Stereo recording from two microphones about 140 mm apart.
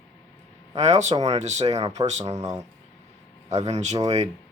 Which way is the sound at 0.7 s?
50° right (ahead or behind).